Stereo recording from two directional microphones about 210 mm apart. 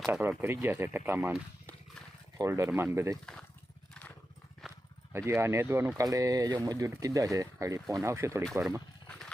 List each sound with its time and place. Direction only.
0.1 s speech: 10° right (ahead or behind)
4.6 s horse: centre (ahead or behind)
5.1 s speech: 10° right (ahead or behind)
9.0 s horse: centre (ahead or behind)